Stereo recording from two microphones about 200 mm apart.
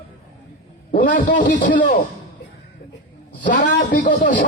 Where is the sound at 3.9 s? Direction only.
40° left (ahead or behind).